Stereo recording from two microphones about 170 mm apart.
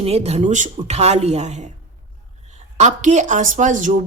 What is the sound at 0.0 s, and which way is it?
A woman's voice, 40° right (ahead or behind).